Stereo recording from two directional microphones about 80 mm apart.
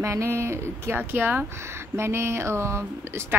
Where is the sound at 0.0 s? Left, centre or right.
Right.